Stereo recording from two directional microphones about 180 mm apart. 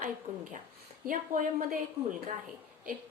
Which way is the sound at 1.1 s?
50° right (ahead or behind).